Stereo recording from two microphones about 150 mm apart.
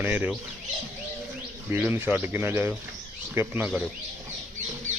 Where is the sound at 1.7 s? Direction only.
15° right (ahead or behind).